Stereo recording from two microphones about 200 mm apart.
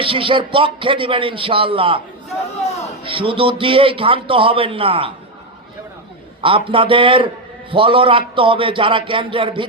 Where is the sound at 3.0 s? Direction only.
25° right (ahead or behind).